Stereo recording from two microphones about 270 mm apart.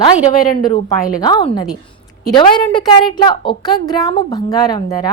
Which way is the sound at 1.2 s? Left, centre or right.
Centre.